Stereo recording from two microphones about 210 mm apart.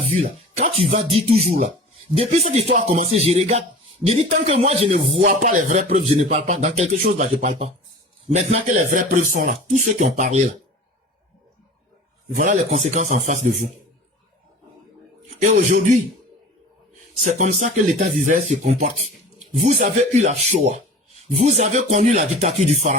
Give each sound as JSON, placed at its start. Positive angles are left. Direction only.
{"t": 0.1, "sound": "speech", "side_deg": -35}
{"t": 5.2, "sound": "speech", "side_deg": -40}
{"t": 12.3, "sound": "speech", "side_deg": -35}
{"t": 17.2, "sound": "speech", "side_deg": -35}